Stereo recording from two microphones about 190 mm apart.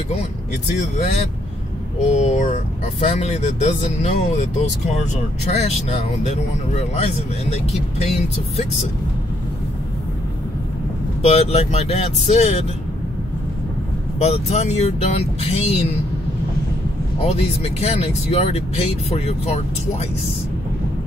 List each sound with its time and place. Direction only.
0.9 s speech: 35° left (ahead or behind)
5.5 s speech: 35° left (ahead or behind)
11.2 s speech: 35° left (ahead or behind)
14.2 s speech: 35° left (ahead or behind)
17.2 s speech: 35° left (ahead or behind)